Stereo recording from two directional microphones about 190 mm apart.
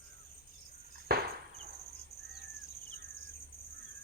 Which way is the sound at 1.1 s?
50° right (ahead or behind).